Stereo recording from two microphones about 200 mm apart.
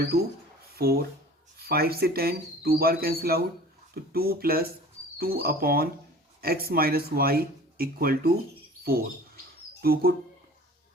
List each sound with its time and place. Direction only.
0.0 s speech: 50° right (ahead or behind)